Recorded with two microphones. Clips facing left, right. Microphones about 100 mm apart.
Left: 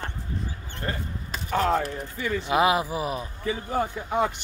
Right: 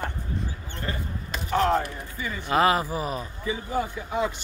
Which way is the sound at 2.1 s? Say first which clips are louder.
Left 6 dB; 70° left (ahead or behind).